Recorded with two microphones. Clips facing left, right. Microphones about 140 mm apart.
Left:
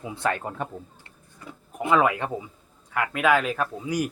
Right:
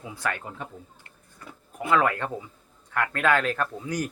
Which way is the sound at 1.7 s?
15° left (ahead or behind).